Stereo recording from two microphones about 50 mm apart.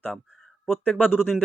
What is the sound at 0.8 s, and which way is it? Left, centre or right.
Speech, centre.